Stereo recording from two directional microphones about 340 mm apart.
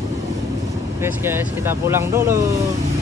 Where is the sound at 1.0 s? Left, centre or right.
Centre.